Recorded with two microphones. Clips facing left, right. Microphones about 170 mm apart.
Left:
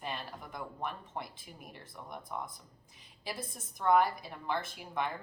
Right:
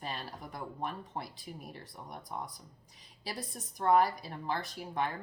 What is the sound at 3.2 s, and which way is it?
A woman's voice, 35° right (ahead or behind).